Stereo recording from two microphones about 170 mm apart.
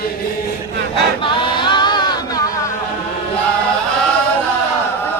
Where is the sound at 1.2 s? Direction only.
25° left (ahead or behind).